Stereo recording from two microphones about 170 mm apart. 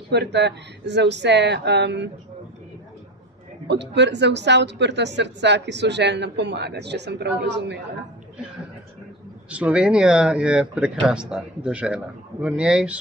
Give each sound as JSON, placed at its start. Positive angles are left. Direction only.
{"t": 0.1, "sound": "speech", "side_deg": -85}
{"t": 3.6, "sound": "speech", "side_deg": -90}
{"t": 9.5, "sound": "speech", "side_deg": -10}